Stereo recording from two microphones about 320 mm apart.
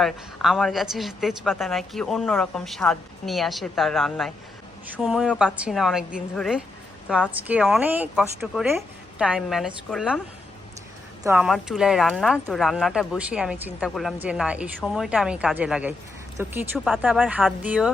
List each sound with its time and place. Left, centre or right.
0.0 s speech: centre
11.2 s speech: centre